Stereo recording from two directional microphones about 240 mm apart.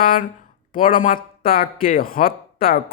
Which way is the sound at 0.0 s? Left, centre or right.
Left.